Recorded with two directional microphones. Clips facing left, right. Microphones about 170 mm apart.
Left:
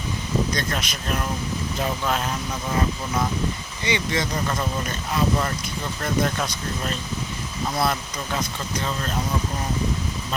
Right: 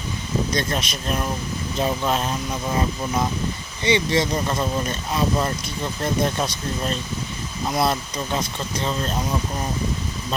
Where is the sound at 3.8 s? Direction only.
25° right (ahead or behind).